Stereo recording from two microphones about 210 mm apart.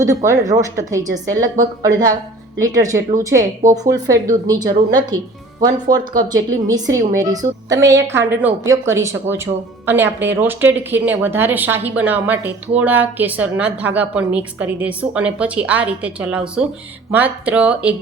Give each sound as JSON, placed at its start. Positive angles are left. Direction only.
{"t": 0.0, "sound": "a woman's voice", "side_deg": -15}